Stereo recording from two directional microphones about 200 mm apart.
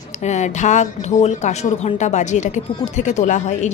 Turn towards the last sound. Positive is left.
turn(degrees=35)  # may be behind; listen again after turning